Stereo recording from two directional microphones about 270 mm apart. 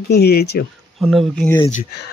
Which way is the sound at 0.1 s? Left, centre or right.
Left.